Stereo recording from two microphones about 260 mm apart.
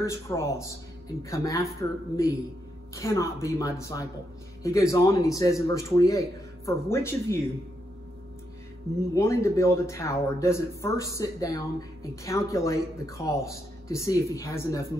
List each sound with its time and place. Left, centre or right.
0.0 s speech: centre
9.1 s speech: centre